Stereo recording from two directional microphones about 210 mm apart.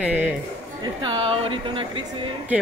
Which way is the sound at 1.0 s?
25° right (ahead or behind).